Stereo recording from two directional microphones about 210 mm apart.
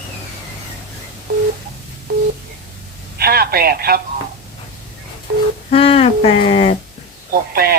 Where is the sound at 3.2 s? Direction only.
45° right (ahead or behind).